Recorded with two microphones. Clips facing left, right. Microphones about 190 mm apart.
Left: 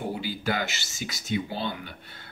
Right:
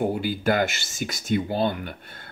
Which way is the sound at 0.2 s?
50° right (ahead or behind).